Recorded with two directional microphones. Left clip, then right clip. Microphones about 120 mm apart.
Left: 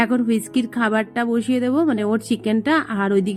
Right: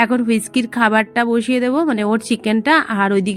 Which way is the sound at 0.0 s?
40° right (ahead or behind).